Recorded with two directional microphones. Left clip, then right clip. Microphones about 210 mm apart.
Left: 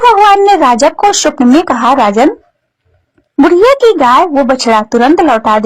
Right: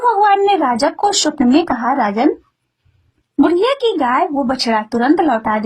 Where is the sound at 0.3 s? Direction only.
25° left (ahead or behind).